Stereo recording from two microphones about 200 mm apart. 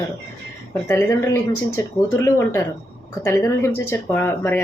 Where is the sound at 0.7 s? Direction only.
15° left (ahead or behind).